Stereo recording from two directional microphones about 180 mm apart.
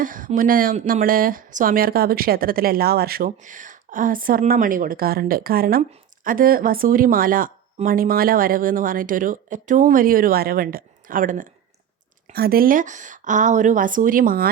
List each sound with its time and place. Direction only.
0.0 s speech: 50° right (ahead or behind)